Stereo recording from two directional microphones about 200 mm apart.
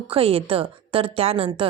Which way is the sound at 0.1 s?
30° right (ahead or behind).